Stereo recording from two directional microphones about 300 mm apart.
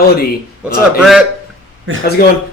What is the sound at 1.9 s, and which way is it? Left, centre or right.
Speech, right.